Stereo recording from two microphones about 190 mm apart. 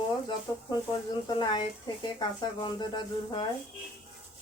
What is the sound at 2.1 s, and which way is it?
Speech, 20° left (ahead or behind).